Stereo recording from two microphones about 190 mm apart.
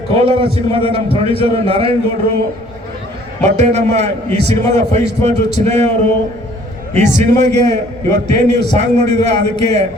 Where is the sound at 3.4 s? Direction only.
35° right (ahead or behind).